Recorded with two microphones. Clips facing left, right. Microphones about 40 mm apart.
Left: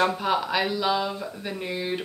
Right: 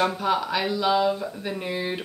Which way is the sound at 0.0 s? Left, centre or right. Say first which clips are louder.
Even; centre.